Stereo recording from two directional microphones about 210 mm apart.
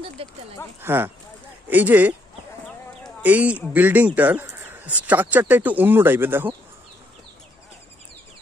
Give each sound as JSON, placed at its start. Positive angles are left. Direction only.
{"t": 0.0, "sound": "speech", "side_deg": -25}
{"t": 0.7, "sound": "speech", "side_deg": -10}
{"t": 3.2, "sound": "speech", "side_deg": -5}